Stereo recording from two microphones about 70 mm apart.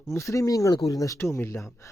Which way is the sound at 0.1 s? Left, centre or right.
Left.